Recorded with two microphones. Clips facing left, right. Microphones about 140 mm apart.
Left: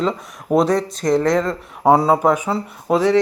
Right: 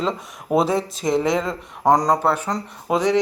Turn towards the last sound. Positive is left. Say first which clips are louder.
# left 3 dB
turn(degrees=0)  # may be behind; listen again after turning